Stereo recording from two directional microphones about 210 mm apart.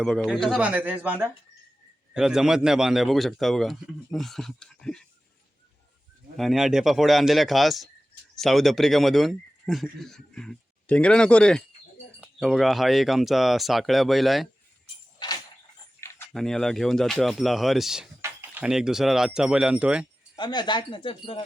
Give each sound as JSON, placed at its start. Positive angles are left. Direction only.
{"t": 0.0, "sound": "speech", "side_deg": 0}
{"t": 6.3, "sound": "speech", "side_deg": 0}
{"t": 16.0, "sound": "a sound", "side_deg": 15}
{"t": 16.3, "sound": "speech", "side_deg": 0}
{"t": 20.3, "sound": "speech", "side_deg": 20}